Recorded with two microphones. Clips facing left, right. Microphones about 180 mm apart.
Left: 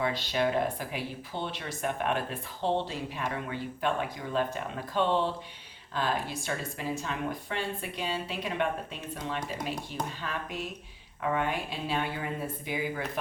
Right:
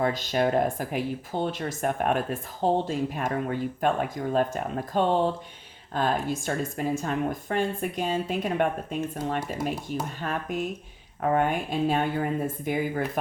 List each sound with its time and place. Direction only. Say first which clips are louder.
0.0 s speech: right 4 dB; 45° right (ahead or behind)